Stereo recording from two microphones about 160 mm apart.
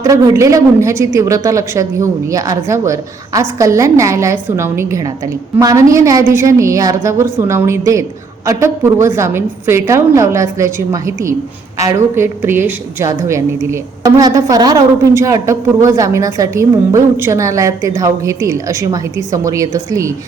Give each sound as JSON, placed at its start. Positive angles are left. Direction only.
{"t": 0.0, "sound": "a woman's voice", "side_deg": -20}